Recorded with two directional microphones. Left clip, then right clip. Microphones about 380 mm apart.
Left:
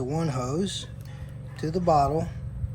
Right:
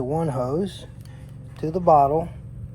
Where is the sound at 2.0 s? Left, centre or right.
Centre.